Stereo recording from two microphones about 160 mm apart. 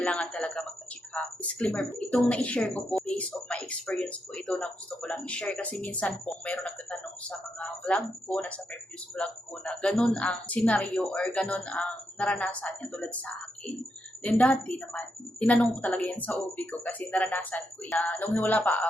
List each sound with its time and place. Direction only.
0.0 s a woman's voice: 5° left (ahead or behind)
14.3 s a woman's voice: 10° left (ahead or behind)